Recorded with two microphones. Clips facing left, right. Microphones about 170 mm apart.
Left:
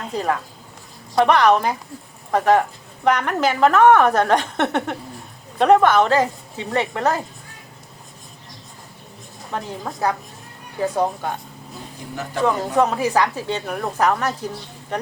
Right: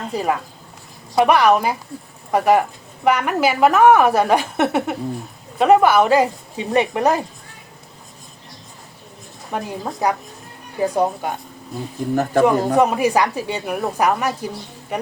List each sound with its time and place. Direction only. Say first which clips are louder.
0.0 s a woman's voice: right 2 dB; 10° right (ahead or behind)
9.5 s a woman's voice: right 3 dB; 10° right (ahead or behind)
12.1 s speech: right 11 dB; 50° right (ahead or behind)
12.7 s a woman's voice: right 2 dB; 15° right (ahead or behind)